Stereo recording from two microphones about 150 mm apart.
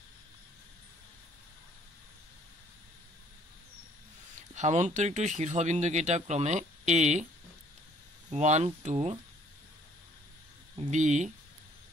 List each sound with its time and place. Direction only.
4.4 s speech: 50° right (ahead or behind)
8.3 s speech: 50° right (ahead or behind)
10.8 s speech: 55° right (ahead or behind)